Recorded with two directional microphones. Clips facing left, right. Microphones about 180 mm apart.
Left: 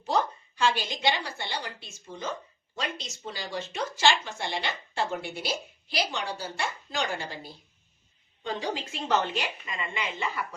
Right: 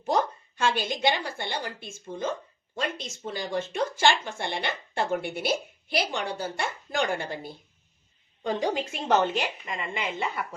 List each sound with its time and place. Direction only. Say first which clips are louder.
0.0 s a woman's voice: right 2 dB; 50° right (ahead or behind)